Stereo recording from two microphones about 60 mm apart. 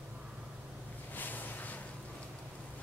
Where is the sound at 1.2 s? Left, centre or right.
Left.